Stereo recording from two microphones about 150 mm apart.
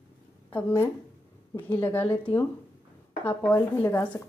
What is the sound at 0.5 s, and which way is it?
Speech, 10° left (ahead or behind).